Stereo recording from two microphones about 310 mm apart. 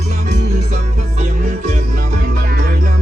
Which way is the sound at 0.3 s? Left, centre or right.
Right.